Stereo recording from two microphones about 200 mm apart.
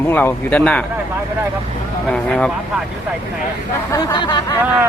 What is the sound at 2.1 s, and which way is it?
Speech, 5° left (ahead or behind).